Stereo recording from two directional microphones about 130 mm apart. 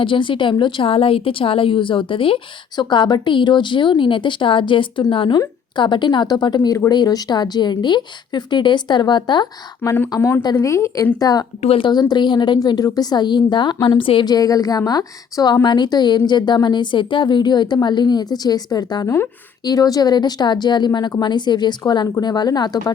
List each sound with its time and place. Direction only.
0.0 s a woman's voice: 40° left (ahead or behind)
10.1 s a woman's voice: 20° left (ahead or behind)
11.2 s a woman's voice: 30° left (ahead or behind)
11.6 s speech: 50° left (ahead or behind)
11.9 s a woman's voice: 35° left (ahead or behind)